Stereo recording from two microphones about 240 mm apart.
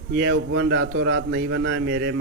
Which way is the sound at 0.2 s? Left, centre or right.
Right.